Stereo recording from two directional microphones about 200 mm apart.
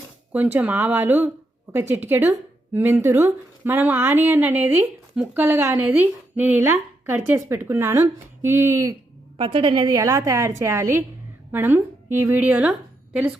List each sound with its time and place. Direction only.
0.3 s a woman's voice: 10° right (ahead or behind)
9.4 s a woman's voice: 25° right (ahead or behind); by 12.7 s 5° right (ahead or behind)